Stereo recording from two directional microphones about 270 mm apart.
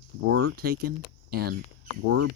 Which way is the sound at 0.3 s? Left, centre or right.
Right.